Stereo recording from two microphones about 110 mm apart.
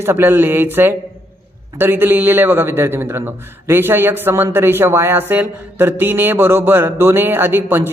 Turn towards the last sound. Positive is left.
turn(degrees=-20)  # may be behind; listen again after turning